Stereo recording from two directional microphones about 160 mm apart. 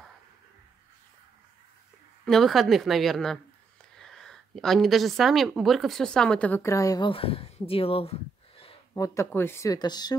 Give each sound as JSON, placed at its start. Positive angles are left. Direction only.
{"t": 2.2, "sound": "a woman's voice", "side_deg": 0}
{"t": 7.1, "sound": "speech", "side_deg": 35}
{"t": 8.9, "sound": "speech", "side_deg": 20}